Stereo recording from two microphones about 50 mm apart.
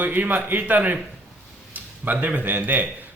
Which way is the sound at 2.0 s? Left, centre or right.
Right.